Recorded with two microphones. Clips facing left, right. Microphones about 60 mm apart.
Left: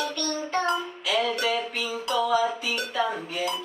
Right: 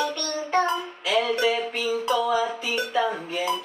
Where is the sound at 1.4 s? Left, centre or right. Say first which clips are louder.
Right 3 dB; right.